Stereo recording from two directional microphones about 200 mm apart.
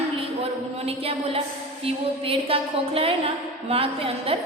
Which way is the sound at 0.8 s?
30° right (ahead or behind).